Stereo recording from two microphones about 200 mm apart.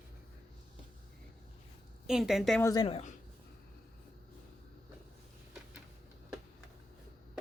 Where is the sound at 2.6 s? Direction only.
20° left (ahead or behind).